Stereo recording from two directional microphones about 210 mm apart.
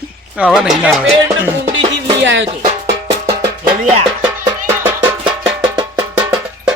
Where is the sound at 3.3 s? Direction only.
25° right (ahead or behind).